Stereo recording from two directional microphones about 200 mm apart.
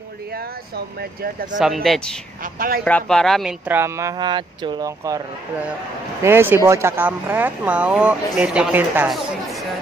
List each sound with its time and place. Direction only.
1.6 s speech: centre (ahead or behind)
2.4 s speech: 45° right (ahead or behind)
2.8 s speech: 5° left (ahead or behind); by 5.2 s 15° right (ahead or behind)
6.2 s speech: 10° right (ahead or behind)